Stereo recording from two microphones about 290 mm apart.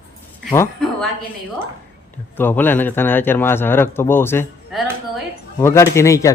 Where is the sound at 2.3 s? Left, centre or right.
Centre.